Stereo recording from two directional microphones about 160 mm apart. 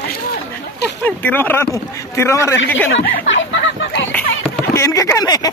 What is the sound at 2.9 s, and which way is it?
Speech, 70° left (ahead or behind).